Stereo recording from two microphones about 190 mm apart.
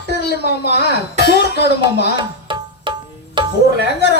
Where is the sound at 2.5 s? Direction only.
25° right (ahead or behind).